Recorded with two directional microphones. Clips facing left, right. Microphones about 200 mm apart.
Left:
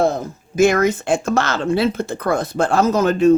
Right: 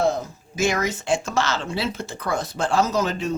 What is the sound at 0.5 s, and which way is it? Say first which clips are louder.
Speech: left 9 dB; 55° left (ahead or behind).